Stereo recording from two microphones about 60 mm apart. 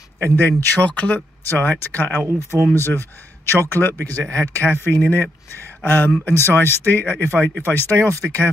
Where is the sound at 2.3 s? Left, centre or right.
Left.